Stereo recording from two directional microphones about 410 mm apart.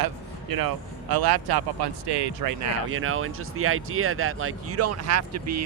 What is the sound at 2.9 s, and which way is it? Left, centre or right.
Speech, right.